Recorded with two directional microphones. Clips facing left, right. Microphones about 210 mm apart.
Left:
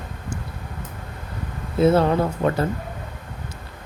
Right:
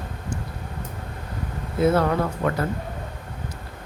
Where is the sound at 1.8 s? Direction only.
25° left (ahead or behind).